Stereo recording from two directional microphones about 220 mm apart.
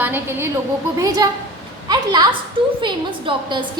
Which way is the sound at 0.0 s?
10° right (ahead or behind).